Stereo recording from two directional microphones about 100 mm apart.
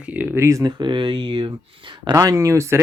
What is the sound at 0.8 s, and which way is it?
Speech, 55° right (ahead or behind).